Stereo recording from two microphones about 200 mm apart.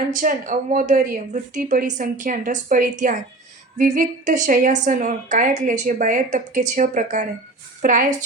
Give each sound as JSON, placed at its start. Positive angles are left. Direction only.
{"t": 0.1, "sound": "a woman's voice", "side_deg": -45}